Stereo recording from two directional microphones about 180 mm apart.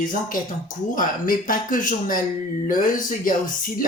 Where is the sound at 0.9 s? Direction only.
50° left (ahead or behind).